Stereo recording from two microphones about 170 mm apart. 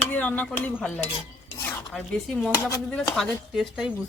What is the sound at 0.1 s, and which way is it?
Speech, 10° left (ahead or behind).